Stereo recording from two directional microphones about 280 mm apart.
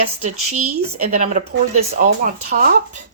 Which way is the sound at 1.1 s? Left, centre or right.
Right.